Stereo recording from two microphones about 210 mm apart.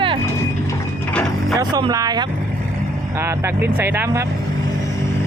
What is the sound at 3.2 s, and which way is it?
Speech, 10° right (ahead or behind).